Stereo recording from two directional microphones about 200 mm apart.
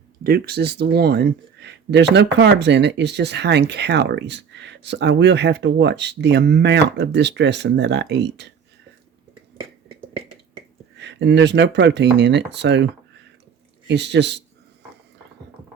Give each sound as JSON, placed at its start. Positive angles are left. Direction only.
{"t": 0.2, "sound": "speech", "side_deg": -50}
{"t": 10.9, "sound": "speech", "side_deg": -60}